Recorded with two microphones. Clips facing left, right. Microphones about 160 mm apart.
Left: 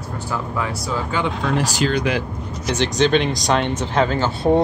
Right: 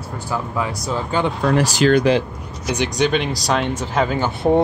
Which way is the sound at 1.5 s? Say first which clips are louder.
Right 4 dB; 90° right.